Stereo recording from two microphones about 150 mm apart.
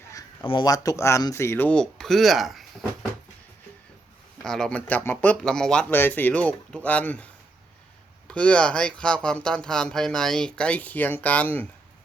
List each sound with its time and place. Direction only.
0.4 s speech: 30° left (ahead or behind); by 2.6 s centre (ahead or behind)
4.4 s speech: 5° left (ahead or behind)
8.3 s speech: 10° left (ahead or behind)